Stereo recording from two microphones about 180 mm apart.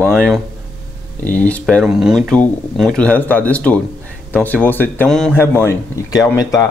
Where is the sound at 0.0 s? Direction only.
5° left (ahead or behind).